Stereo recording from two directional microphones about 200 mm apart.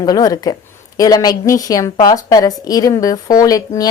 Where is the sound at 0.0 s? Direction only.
20° left (ahead or behind).